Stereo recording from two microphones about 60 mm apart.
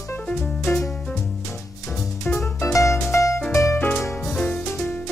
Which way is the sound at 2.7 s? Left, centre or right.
Left.